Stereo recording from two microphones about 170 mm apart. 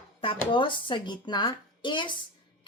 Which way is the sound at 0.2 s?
30° left (ahead or behind).